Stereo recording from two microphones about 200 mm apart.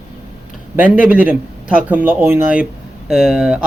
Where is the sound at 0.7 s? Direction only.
5° right (ahead or behind).